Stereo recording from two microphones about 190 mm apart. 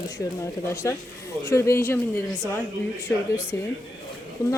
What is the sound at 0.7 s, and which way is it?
Speech, 15° left (ahead or behind).